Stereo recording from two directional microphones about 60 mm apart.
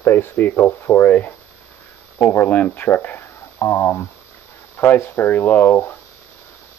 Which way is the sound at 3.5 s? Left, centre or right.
Left.